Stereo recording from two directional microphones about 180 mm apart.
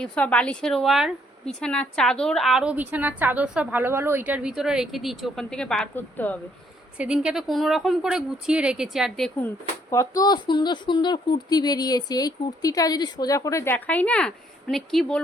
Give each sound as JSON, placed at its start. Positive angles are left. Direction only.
{"t": 0.0, "sound": "speech", "side_deg": 5}
{"t": 7.0, "sound": "speech", "side_deg": -5}
{"t": 9.9, "sound": "speech", "side_deg": 20}